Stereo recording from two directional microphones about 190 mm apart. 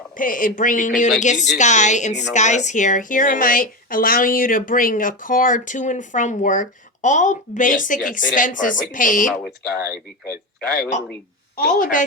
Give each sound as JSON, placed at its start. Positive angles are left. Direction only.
{"t": 0.2, "sound": "a woman's voice", "side_deg": 45}
{"t": 10.8, "sound": "a man's voice", "side_deg": 40}